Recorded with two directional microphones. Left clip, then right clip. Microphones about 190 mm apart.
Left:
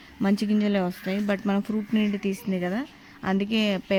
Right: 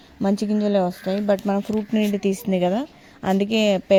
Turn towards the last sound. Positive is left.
turn(degrees=-15)  # may be behind; listen again after turning